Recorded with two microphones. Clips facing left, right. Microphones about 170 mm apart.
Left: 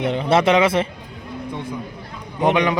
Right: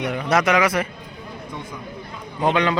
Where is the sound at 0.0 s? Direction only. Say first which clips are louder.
Left 3 dB; 25° left (ahead or behind).